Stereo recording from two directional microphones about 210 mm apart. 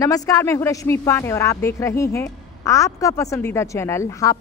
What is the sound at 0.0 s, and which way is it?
Speech, 15° left (ahead or behind).